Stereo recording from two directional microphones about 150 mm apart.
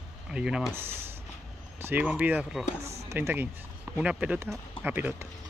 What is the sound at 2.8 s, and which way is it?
Speech, 45° right (ahead or behind).